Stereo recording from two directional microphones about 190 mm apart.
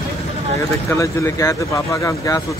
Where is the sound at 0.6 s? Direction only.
15° left (ahead or behind).